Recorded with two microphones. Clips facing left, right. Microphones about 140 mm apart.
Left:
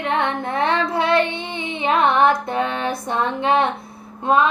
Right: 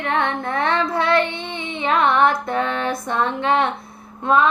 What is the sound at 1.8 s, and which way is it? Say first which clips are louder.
Female singing: left 1 dB; 20° left (ahead or behind).